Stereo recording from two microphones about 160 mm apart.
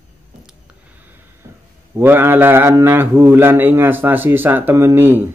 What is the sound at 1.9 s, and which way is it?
A man's voice, 15° right (ahead or behind).